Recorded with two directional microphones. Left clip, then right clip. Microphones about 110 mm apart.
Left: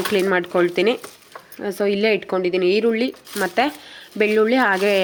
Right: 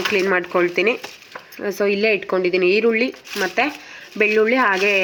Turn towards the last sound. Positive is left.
turn(degrees=55)  # may be behind; listen again after turning